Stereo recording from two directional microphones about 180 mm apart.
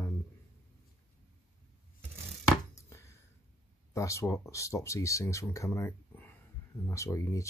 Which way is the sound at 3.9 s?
15° left (ahead or behind).